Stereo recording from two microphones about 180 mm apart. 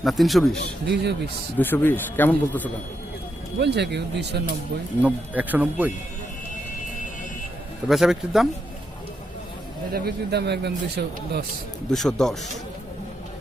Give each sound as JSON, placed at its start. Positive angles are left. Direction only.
{"t": 0.0, "sound": "a man's voice", "side_deg": 0}
{"t": 0.9, "sound": "speech", "side_deg": -70}
{"t": 1.5, "sound": "speech", "side_deg": 10}
{"t": 3.6, "sound": "speech", "side_deg": -70}
{"t": 5.0, "sound": "a man's voice", "side_deg": -10}
{"t": 7.9, "sound": "a man's voice", "side_deg": 0}
{"t": 9.9, "sound": "a man's voice", "side_deg": -60}
{"t": 11.9, "sound": "a man's voice", "side_deg": 5}